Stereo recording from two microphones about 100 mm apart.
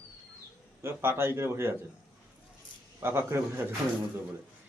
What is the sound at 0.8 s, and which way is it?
Speech, 25° right (ahead or behind).